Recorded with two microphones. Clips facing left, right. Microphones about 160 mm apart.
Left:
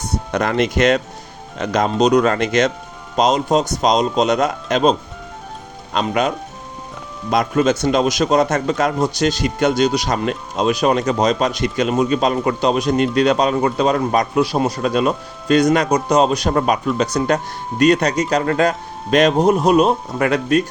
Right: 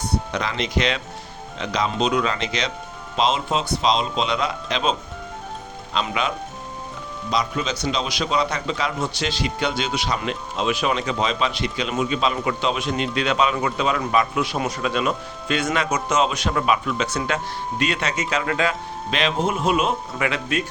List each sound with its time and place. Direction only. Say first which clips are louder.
0.3 s speech: left 8 dB; 50° left (ahead or behind)